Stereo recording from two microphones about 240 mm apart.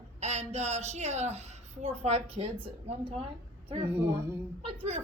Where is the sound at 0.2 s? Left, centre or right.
Right.